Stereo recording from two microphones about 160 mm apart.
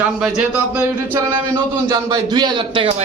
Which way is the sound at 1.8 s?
25° right (ahead or behind).